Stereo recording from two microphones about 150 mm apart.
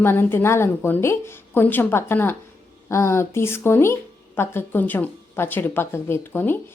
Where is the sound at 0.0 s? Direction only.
15° left (ahead or behind).